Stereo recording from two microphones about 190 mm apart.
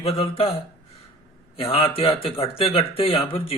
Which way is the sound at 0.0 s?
30° left (ahead or behind).